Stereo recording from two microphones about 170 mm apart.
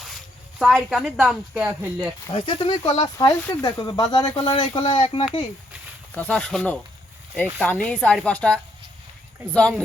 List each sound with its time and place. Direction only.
0.6 s speech: centre (ahead or behind)
2.3 s speech: 30° left (ahead or behind)
6.1 s a woman's voice: 10° left (ahead or behind)